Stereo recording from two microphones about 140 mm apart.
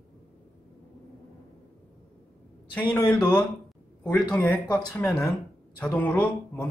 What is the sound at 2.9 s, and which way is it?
Speech, 10° left (ahead or behind).